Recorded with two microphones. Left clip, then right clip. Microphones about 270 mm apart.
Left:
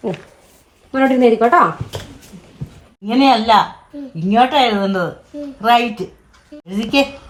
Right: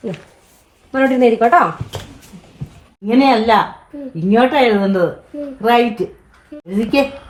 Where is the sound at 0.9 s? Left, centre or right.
Centre.